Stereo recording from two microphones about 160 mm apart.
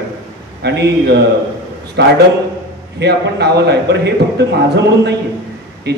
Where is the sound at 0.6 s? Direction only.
90° right.